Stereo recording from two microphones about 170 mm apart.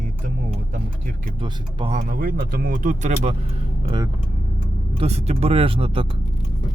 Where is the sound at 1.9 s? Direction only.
55° right (ahead or behind).